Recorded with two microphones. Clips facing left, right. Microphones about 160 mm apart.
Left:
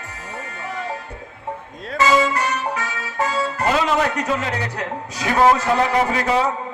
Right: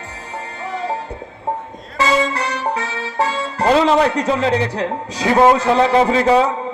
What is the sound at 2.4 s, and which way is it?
Speech, 30° right (ahead or behind).